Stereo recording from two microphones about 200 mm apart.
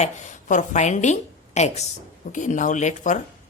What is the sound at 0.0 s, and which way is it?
A woman's voice, 40° left (ahead or behind).